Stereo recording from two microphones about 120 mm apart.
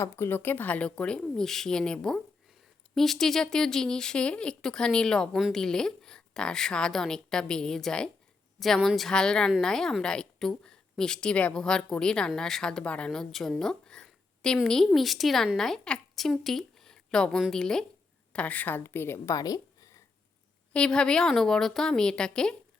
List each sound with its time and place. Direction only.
0.0 s a woman's voice: 20° left (ahead or behind)
20.7 s speech: 5° left (ahead or behind)